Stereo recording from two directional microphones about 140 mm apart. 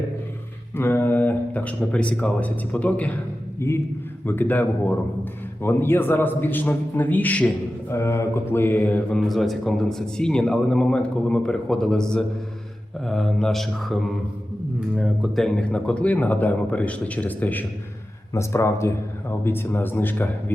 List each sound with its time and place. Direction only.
0.8 s a man's voice: 15° left (ahead or behind)
13.1 s mantra: 5° left (ahead or behind)
14.9 s a man's voice: 5° right (ahead or behind); by 20.2 s 15° left (ahead or behind)